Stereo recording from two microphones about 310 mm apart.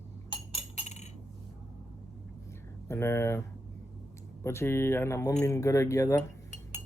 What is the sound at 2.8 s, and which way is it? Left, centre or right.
Speech, centre.